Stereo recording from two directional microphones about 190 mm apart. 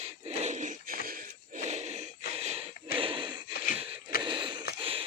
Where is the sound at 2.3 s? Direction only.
35° right (ahead or behind).